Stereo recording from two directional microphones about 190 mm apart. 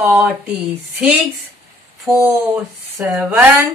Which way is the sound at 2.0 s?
5° right (ahead or behind).